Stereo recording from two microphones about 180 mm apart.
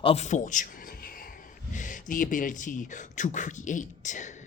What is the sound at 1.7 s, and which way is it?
Speech, 45° left (ahead or behind).